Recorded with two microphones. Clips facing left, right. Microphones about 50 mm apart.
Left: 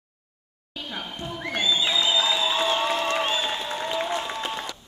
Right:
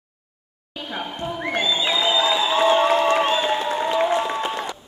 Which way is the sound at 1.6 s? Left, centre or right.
Centre.